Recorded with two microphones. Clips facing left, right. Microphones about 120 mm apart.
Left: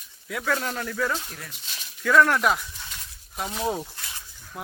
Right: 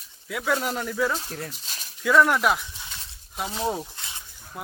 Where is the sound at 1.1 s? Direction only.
35° right (ahead or behind).